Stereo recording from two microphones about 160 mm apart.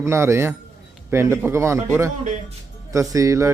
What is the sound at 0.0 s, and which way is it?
A man's voice, 15° right (ahead or behind).